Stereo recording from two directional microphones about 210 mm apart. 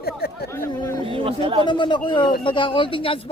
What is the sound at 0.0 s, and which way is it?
Chatter, 45° left (ahead or behind).